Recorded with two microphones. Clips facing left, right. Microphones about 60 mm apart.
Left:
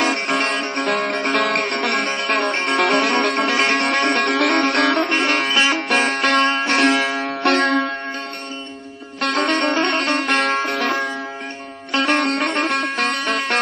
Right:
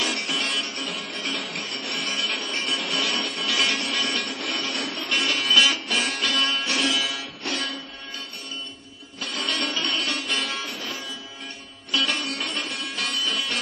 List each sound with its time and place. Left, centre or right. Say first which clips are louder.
0.0 s music: left 8 dB; left
2.0 s music: left 7 dB; left
2.3 s music: left 10 dB; left
3.5 s music: left 7 dB; left
3.8 s music: left 10 dB; left
5.0 s music: left 7 dB; left
5.8 s music: left 8 dB; left
7.2 s music: left 14 dB; left
9.2 s music: left 10 dB; left
11.9 s sitar: left 8 dB; left